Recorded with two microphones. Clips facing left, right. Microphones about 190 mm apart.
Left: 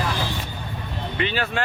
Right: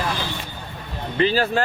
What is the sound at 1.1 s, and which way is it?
Speech, 35° right (ahead or behind).